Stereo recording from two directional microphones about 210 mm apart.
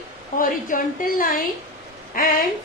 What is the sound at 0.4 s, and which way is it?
A woman's voice, 40° left (ahead or behind).